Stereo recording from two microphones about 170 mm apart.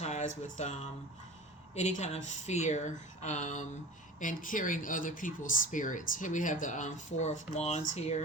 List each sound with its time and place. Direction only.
0.0 s speech: 45° left (ahead or behind)